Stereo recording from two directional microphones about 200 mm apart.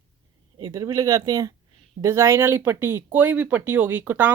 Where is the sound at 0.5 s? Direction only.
20° right (ahead or behind).